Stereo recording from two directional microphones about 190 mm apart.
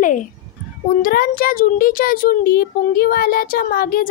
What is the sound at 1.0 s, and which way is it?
A child's voice, 50° left (ahead or behind).